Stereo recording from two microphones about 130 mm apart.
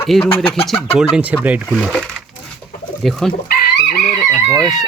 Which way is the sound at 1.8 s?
Centre (ahead or behind).